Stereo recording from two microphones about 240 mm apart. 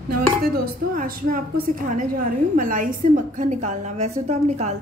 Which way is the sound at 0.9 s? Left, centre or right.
Right.